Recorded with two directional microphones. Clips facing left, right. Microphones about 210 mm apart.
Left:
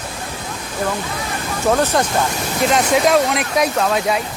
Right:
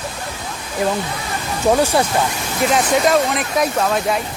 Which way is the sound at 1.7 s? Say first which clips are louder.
Right 1 dB; 10° right (ahead or behind).